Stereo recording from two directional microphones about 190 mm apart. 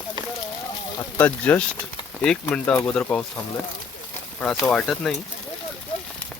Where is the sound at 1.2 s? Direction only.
10° left (ahead or behind).